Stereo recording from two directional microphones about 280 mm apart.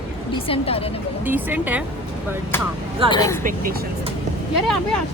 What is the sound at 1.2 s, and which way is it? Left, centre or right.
Speech, centre.